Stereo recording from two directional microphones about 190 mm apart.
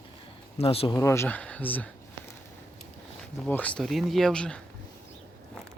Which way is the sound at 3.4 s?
10° left (ahead or behind).